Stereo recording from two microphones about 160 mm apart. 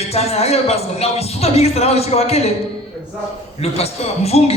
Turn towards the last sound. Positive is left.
turn(degrees=40)  # may be behind; listen again after turning